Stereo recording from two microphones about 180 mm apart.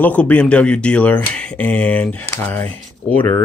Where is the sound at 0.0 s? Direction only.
10° left (ahead or behind).